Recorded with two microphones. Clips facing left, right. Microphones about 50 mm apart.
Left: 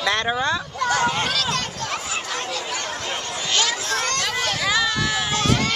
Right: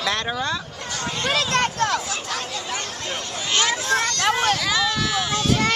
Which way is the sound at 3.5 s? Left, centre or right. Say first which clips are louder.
Right 1 dB; right.